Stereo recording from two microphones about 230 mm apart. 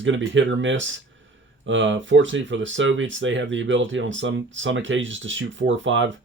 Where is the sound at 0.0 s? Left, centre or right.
Right.